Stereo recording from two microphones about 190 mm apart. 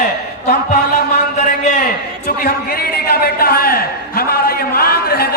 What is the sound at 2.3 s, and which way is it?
A man's voice, 55° left (ahead or behind).